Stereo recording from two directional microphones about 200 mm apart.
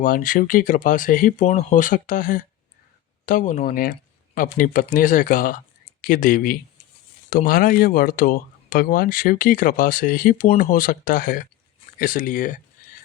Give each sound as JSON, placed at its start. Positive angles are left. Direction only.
{"t": 0.0, "sound": "speech", "side_deg": 45}